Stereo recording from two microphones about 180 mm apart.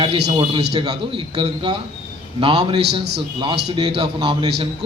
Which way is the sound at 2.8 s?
65° right (ahead or behind).